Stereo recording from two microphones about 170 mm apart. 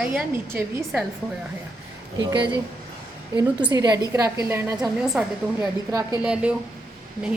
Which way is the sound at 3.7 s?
20° right (ahead or behind).